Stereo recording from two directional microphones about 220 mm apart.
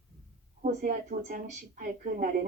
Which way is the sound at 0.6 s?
40° right (ahead or behind).